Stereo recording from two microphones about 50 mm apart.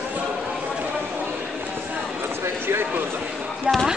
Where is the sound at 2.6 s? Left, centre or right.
Right.